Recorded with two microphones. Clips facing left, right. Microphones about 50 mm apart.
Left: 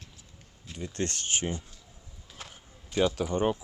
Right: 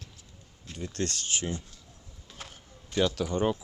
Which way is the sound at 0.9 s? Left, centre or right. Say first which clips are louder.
Left 1 dB; left.